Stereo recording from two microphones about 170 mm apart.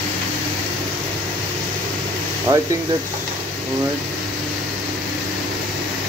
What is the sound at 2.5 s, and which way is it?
Speech, 20° right (ahead or behind).